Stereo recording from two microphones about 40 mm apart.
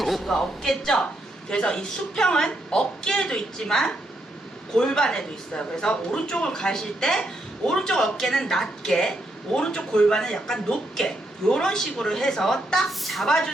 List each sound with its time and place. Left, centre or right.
0.0 s a woman's voice: centre
13.1 s a woman's voice: centre